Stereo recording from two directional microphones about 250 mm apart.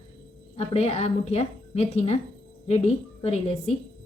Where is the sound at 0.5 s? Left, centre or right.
Left.